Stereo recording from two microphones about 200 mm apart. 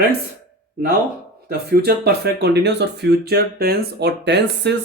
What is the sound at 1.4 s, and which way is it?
Speech, 50° right (ahead or behind).